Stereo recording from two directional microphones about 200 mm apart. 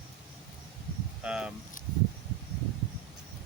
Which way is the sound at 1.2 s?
5° right (ahead or behind).